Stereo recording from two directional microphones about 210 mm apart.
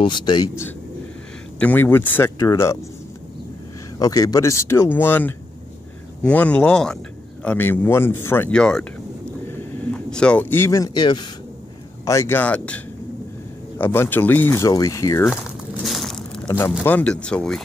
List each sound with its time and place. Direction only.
0.0 s speech: 20° left (ahead or behind)
4.0 s speech: 15° left (ahead or behind)
15.2 s crumpling: centre (ahead or behind)
16.4 s speech: 10° left (ahead or behind)